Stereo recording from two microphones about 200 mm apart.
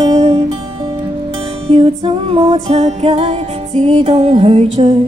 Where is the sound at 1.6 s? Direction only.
25° right (ahead or behind).